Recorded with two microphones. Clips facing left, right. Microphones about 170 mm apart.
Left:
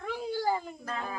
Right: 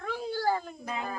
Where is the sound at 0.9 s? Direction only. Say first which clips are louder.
Right 2 dB; 10° right (ahead or behind).